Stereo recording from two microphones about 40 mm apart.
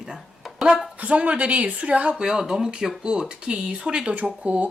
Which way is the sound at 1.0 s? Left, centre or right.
Right.